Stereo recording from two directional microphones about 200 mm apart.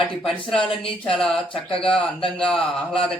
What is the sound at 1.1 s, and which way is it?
Speech, centre (ahead or behind).